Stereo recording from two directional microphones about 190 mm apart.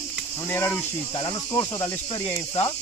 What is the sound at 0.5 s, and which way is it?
Cricket, 10° left (ahead or behind).